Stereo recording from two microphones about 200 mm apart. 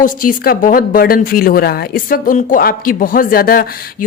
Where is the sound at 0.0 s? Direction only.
45° left (ahead or behind).